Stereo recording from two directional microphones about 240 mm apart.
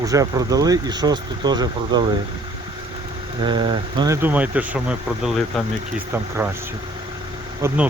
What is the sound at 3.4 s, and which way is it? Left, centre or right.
Speech, centre.